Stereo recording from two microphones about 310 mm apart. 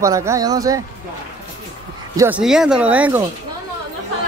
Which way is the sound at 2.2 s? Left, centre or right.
Centre.